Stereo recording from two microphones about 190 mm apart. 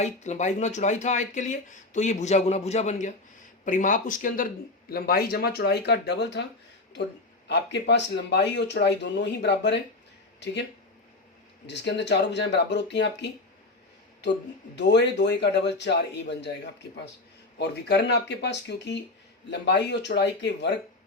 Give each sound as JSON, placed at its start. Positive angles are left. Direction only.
{"t": 0.0, "sound": "speech", "side_deg": 40}
{"t": 7.4, "sound": "speech", "side_deg": 65}
{"t": 14.8, "sound": "speech", "side_deg": 65}